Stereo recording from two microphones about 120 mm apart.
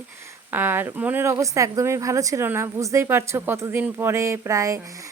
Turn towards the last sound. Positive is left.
turn(degrees=-25)  # may be behind; listen again after turning